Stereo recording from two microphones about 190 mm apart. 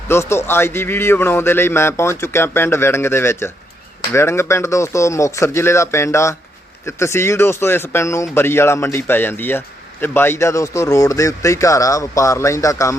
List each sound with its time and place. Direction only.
0.1 s speech: 15° left (ahead or behind)